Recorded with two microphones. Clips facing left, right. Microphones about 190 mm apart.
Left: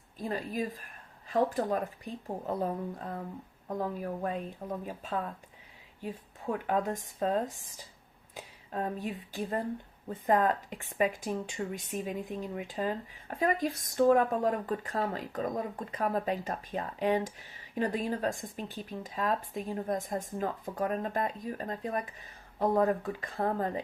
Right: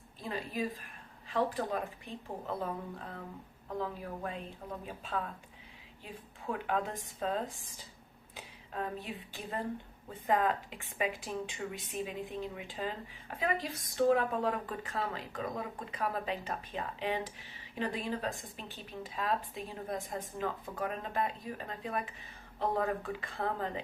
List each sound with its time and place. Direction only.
0.2 s speech: 45° left (ahead or behind)
3.7 s speech: 45° left (ahead or behind)
6.0 s speech: 40° left (ahead or behind)
8.4 s a sound: 40° left (ahead or behind)
9.3 s speech: 45° left (ahead or behind)